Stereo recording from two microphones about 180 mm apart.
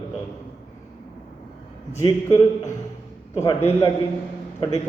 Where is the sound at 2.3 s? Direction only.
15° left (ahead or behind).